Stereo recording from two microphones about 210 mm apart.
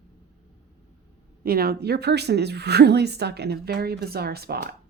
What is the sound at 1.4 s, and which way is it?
A woman's voice, 45° right (ahead or behind).